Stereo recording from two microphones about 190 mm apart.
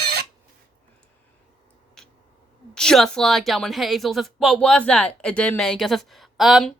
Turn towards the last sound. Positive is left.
turn(degrees=0)  # may be behind; listen again after turning